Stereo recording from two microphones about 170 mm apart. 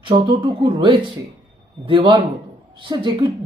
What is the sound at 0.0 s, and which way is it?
Speech, 30° right (ahead or behind).